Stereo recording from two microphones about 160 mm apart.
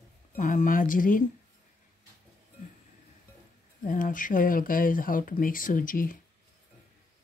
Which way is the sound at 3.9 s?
55° left (ahead or behind).